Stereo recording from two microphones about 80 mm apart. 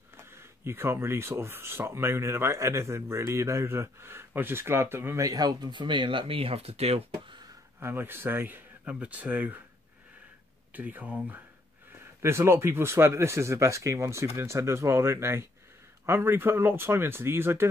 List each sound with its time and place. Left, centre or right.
0.2 s speech: right
5.2 s speech: right
7.8 s speech: right
10.7 s speech: right
12.2 s speech: right